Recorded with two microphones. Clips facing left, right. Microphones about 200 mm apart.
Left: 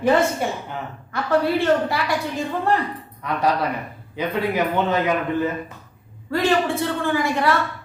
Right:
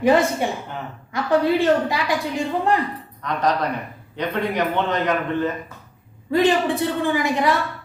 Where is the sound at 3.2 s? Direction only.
10° left (ahead or behind).